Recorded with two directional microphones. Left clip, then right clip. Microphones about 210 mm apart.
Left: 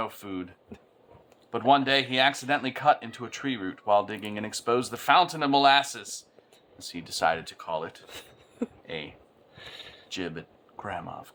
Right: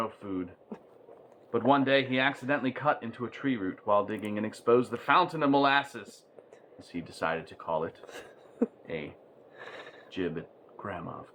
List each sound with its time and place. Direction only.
0.0 s speech: 20° left (ahead or behind)
1.5 s speech: 15° left (ahead or behind)
8.0 s a sound: 5° left (ahead or behind)
8.6 s speech: 20° left (ahead or behind)
9.6 s a sound: 5° left (ahead or behind)
10.1 s speech: 20° left (ahead or behind)